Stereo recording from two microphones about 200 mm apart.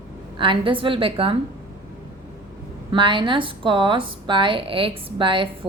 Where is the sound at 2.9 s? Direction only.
25° right (ahead or behind).